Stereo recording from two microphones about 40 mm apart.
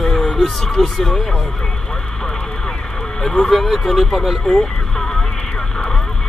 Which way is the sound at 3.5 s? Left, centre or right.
Centre.